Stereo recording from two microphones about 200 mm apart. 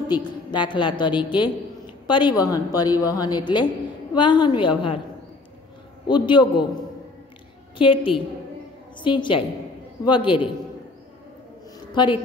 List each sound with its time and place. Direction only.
0.1 s a woman's voice: 20° left (ahead or behind)
6.0 s a woman's voice: 20° left (ahead or behind)
7.7 s a woman's voice: 25° left (ahead or behind)
11.9 s a woman's voice: 25° left (ahead or behind)